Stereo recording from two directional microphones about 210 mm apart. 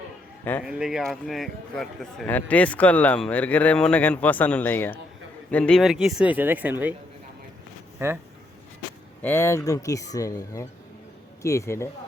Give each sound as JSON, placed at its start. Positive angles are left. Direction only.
{"t": 0.6, "sound": "speech", "side_deg": -5}
{"t": 7.9, "sound": "speech", "side_deg": -10}
{"t": 9.2, "sound": "speech", "side_deg": 10}